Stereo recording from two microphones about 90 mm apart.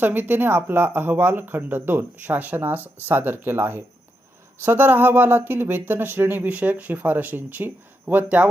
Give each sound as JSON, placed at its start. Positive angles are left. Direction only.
{"t": 0.0, "sound": "speech", "side_deg": -20}